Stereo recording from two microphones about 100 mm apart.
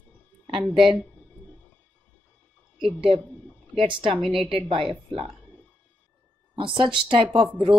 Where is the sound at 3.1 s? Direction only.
15° left (ahead or behind).